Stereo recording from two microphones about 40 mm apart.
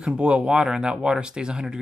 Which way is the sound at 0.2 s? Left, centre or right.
Right.